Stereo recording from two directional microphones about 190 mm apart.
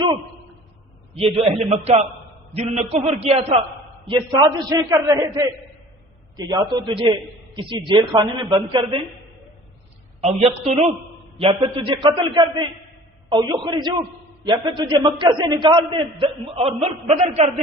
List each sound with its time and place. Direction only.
1.1 s a man's voice: 30° right (ahead or behind)
10.2 s a man's voice: 35° right (ahead or behind)